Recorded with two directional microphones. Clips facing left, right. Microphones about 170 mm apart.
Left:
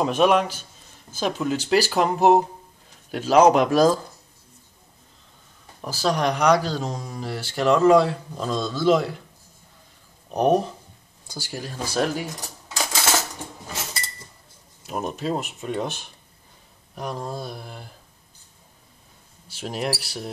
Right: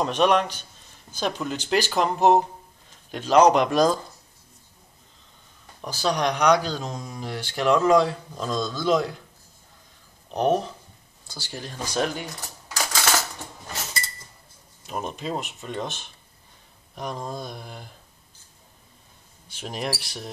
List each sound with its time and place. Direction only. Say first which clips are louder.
0.0 s speech: left 2 dB; 5° left (ahead or behind)
5.8 s speech: left 2 dB; 5° left (ahead or behind)
10.3 s speech: left 3 dB; 10° left (ahead or behind)
14.9 s speech: left 3 dB; 5° left (ahead or behind)
19.4 s speech: left 3 dB; 5° left (ahead or behind)